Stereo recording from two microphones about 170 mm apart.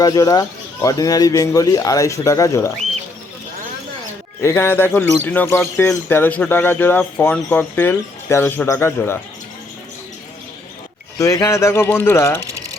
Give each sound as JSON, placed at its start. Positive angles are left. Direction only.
{"t": 0.0, "sound": "speech", "side_deg": 20}
{"t": 4.4, "sound": "speech", "side_deg": 15}
{"t": 11.2, "sound": "speech", "side_deg": 20}